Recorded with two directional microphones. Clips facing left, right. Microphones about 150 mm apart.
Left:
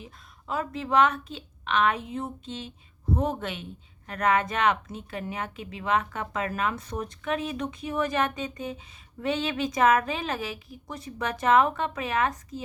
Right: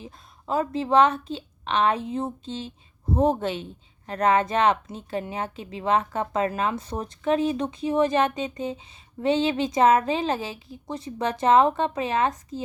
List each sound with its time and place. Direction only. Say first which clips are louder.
0.0 s a woman's voice: right 4 dB; 30° right (ahead or behind)